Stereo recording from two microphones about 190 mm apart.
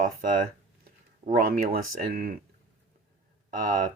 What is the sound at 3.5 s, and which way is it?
Speech, 40° right (ahead or behind).